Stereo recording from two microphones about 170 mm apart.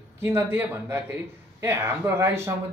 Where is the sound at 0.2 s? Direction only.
15° right (ahead or behind).